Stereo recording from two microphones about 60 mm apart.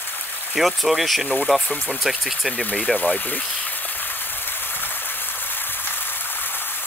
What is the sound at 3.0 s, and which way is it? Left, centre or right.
Rain on surface, left.